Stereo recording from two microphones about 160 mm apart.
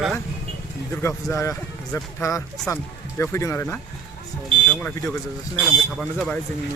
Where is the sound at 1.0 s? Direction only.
20° left (ahead or behind).